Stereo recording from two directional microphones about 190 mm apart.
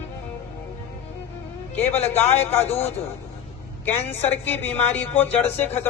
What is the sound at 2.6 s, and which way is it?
Speech, 35° left (ahead or behind).